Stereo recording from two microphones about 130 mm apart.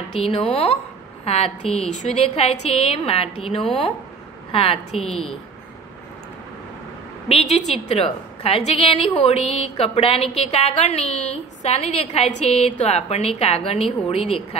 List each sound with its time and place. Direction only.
0.1 s a woman's voice: 45° left (ahead or behind)
5.0 s a woman's voice: 5° left (ahead or behind)
7.2 s a sound: 50° left (ahead or behind)
7.7 s a woman's voice: 50° left (ahead or behind)